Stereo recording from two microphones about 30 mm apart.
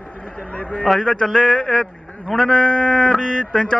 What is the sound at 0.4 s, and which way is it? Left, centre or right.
Speech, left.